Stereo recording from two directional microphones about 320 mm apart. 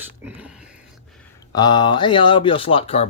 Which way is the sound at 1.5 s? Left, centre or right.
Centre.